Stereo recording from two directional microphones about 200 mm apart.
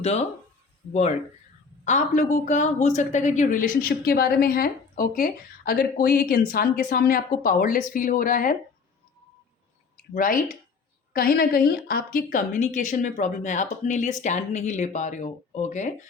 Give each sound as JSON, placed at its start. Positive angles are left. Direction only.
{"t": 0.0, "sound": "speech", "side_deg": 35}
{"t": 1.8, "sound": "a woman's voice", "side_deg": 35}
{"t": 10.2, "sound": "a woman's voice", "side_deg": 45}